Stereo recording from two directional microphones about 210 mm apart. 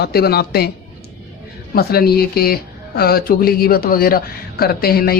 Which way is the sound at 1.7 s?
45° left (ahead or behind).